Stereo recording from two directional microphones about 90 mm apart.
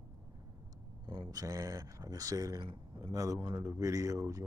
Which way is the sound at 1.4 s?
40° right (ahead or behind).